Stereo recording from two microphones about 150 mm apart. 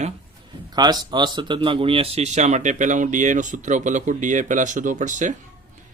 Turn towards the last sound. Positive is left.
turn(degrees=-55)  # may be behind; listen again after turning